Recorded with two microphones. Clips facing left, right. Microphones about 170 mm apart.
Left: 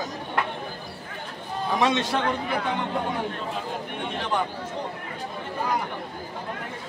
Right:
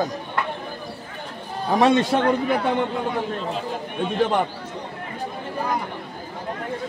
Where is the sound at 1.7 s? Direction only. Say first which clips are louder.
Right 6 dB; 45° right (ahead or behind).